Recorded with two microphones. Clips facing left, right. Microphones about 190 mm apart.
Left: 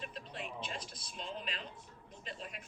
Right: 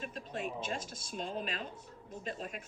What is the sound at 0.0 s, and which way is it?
Speech, 45° right (ahead or behind).